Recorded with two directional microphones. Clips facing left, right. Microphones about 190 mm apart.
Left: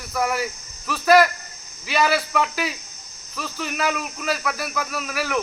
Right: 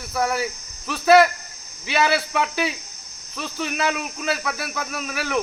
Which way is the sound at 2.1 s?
25° right (ahead or behind).